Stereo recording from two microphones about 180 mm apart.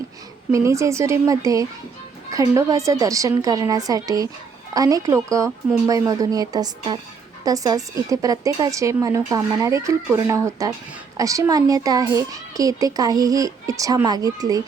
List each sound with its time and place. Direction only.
0.5 s a woman's voice: 15° right (ahead or behind)